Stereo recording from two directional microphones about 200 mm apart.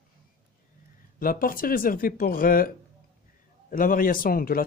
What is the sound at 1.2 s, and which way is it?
Speech, 45° left (ahead or behind).